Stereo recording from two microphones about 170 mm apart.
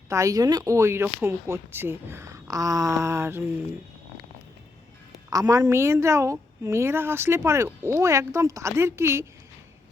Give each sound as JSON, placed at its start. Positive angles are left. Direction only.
{"t": 0.1, "sound": "speech", "side_deg": -20}
{"t": 5.3, "sound": "speech", "side_deg": -20}